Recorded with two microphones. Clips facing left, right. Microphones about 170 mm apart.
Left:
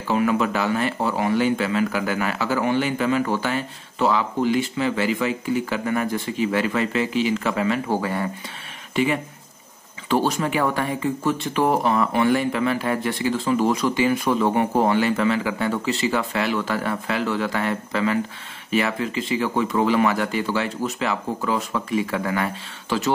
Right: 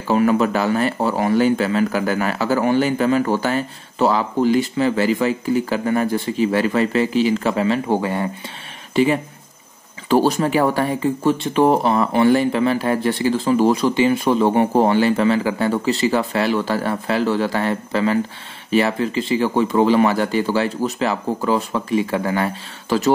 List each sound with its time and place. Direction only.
0.1 s speech: 40° right (ahead or behind)